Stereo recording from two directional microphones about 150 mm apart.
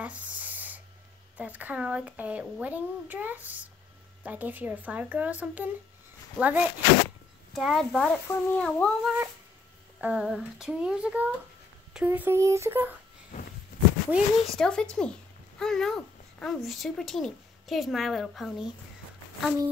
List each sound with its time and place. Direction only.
0.0 s a sound: 10° right (ahead or behind)
1.3 s speech: 10° right (ahead or behind)
7.5 s speech: centre (ahead or behind)
9.9 s speech: 5° right (ahead or behind)
13.7 s a sound: 80° left
14.1 s speech: 5° left (ahead or behind)